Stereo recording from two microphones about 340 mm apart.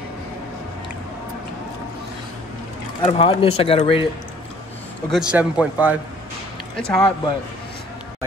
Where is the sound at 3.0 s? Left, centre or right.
Centre.